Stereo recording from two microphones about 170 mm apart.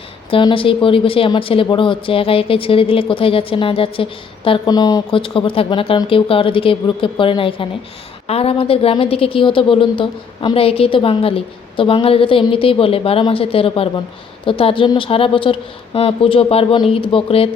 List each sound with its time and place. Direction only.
0.3 s speech: 30° left (ahead or behind)